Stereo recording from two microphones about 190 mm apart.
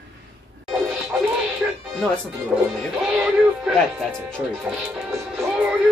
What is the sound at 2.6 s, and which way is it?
Speech, centre (ahead or behind).